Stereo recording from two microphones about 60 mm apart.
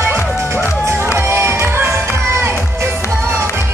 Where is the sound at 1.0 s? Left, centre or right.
Right.